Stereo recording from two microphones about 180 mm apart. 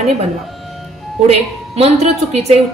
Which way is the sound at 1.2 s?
35° right (ahead or behind).